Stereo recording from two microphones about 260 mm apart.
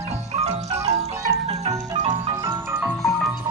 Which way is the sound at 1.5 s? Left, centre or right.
Right.